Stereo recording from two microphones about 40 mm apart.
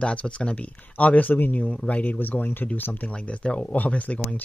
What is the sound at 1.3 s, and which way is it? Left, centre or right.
Speech, left.